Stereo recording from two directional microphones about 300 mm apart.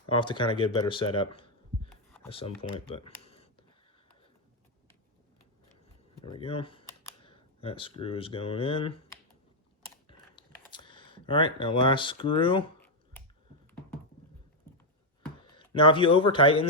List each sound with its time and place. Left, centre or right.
0.1 s speech: centre
6.2 s speech: centre
10.1 s a sound: centre
15.5 s speech: centre